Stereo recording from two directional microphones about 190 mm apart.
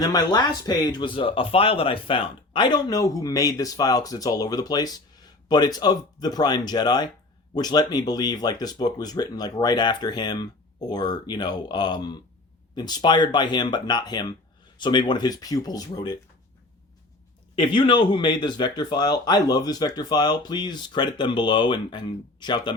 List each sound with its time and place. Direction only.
0.0 s a man's voice: 20° left (ahead or behind)
17.5 s a man's voice: 25° left (ahead or behind)